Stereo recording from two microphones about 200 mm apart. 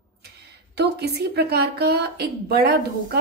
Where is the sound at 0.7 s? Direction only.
55° right (ahead or behind).